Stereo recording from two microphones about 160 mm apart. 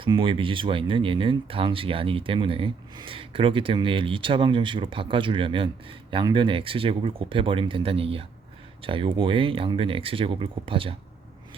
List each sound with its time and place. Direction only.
0.0 s speech: 30° right (ahead or behind)